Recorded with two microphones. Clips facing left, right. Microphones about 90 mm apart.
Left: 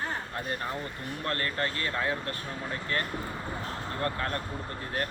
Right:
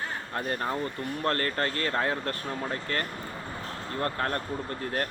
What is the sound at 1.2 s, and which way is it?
Speech, 45° right (ahead or behind).